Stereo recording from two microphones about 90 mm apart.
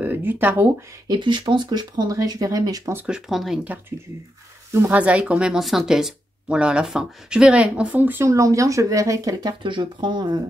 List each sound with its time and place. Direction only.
0.0 s speech: 20° right (ahead or behind)
1.0 s speech: 60° right (ahead or behind); by 2.9 s 40° right (ahead or behind)
3.1 s speech: 5° right (ahead or behind)
4.8 s speech: 15° right (ahead or behind)
8.3 s speech: 35° right (ahead or behind); by 10.4 s 55° right (ahead or behind)